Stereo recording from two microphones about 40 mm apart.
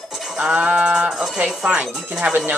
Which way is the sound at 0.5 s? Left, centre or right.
Right.